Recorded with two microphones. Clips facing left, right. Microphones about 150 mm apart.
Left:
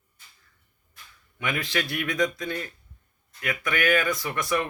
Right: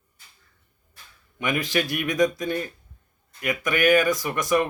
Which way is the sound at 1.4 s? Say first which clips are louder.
Right 4 dB; 20° right (ahead or behind).